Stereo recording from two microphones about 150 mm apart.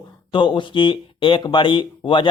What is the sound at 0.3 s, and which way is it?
Speech, 30° left (ahead or behind).